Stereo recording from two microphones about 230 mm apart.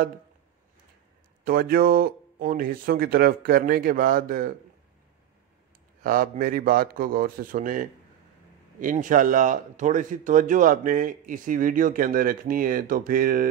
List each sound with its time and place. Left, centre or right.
1.4 s a man's voice: right
6.0 s a man's voice: right